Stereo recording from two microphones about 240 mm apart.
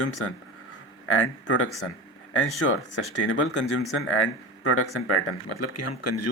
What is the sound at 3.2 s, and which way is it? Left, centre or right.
Speech, left.